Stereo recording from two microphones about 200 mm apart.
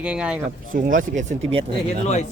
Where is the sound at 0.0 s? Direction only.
5° right (ahead or behind).